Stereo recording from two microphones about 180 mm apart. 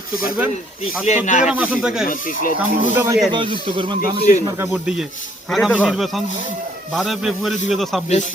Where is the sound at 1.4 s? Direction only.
10° right (ahead or behind).